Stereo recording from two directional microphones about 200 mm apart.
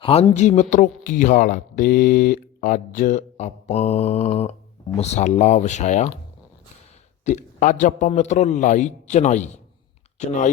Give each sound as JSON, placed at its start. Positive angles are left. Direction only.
{"t": 0.0, "sound": "speech", "side_deg": 30}
{"t": 7.3, "sound": "speech", "side_deg": 35}